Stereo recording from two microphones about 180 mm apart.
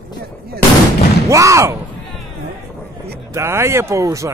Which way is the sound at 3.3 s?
15° right (ahead or behind).